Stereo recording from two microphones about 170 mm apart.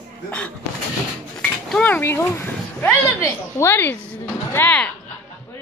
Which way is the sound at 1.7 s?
10° left (ahead or behind).